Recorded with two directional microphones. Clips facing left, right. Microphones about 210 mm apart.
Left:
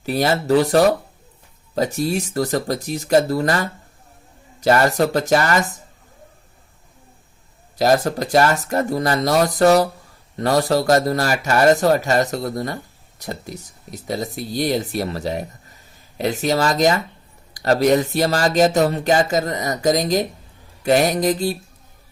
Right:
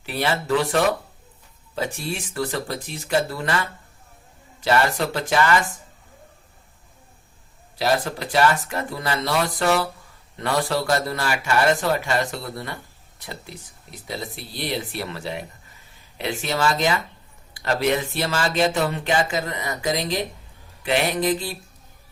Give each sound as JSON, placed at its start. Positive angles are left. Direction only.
{"t": 0.0, "sound": "speech", "side_deg": 40}
{"t": 7.8, "sound": "speech", "side_deg": 40}